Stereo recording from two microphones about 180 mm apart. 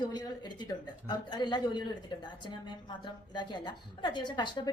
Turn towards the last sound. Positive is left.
turn(degrees=25)  # may be behind; listen again after turning